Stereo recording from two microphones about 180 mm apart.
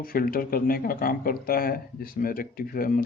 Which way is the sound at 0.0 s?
55° left (ahead or behind).